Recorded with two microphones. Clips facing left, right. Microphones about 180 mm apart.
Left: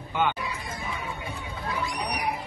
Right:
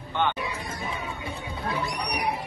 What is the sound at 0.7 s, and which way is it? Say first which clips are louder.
Music: right 1 dB; 30° right (ahead or behind).